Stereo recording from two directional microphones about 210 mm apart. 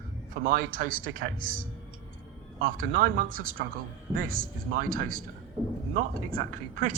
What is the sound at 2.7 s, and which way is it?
Speech, 40° right (ahead or behind).